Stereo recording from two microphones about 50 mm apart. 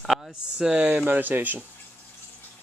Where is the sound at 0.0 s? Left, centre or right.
Centre.